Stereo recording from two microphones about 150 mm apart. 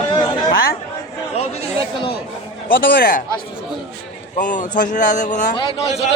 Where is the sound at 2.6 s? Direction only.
75° left (ahead or behind).